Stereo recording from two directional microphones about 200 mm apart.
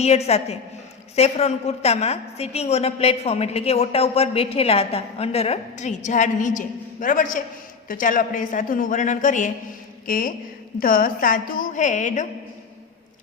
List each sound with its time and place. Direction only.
0.0 s a woman's voice: 30° left (ahead or behind)